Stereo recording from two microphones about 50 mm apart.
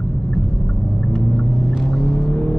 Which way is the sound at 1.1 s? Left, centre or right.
Centre.